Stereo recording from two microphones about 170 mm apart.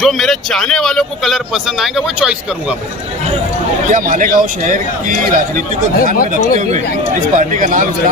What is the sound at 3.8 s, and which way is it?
A man's voice, 50° right (ahead or behind).